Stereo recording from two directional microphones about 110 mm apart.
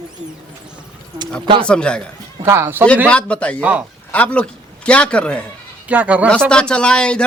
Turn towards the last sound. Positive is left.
turn(degrees=10)  # may be behind; listen again after turning